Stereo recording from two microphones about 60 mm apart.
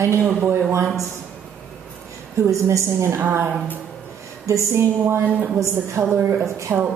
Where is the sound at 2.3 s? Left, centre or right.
Right.